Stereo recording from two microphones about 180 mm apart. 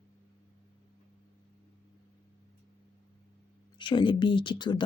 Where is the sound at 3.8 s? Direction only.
25° left (ahead or behind).